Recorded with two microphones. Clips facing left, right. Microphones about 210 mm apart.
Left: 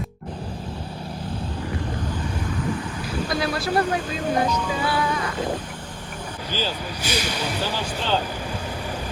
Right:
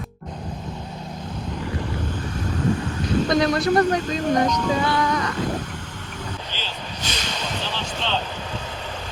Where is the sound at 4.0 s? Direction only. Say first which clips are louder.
Right 4 dB; 40° right (ahead or behind).